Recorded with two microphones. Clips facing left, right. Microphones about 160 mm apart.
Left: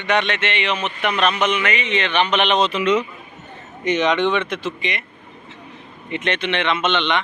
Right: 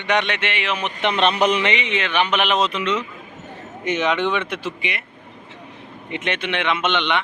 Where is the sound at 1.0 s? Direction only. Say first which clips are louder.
Right 2 dB; 25° right (ahead or behind).